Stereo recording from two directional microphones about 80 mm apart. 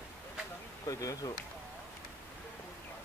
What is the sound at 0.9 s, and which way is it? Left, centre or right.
Speech, left.